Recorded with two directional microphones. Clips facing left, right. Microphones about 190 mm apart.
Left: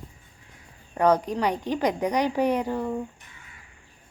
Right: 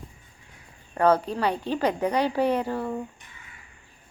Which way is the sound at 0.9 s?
15° left (ahead or behind).